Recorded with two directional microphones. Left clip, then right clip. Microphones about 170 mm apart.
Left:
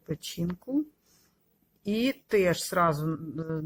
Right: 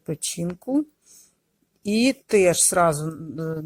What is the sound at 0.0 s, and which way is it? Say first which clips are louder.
Speech: right 6 dB; 40° right (ahead or behind).